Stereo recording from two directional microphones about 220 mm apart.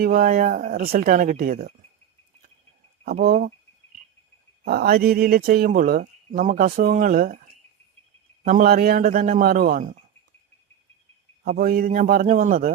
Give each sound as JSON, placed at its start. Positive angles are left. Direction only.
{"t": 0.0, "sound": "speech", "side_deg": -40}
{"t": 3.0, "sound": "speech", "side_deg": -45}
{"t": 4.6, "sound": "speech", "side_deg": -45}
{"t": 8.4, "sound": "speech", "side_deg": -40}
{"t": 11.4, "sound": "speech", "side_deg": -40}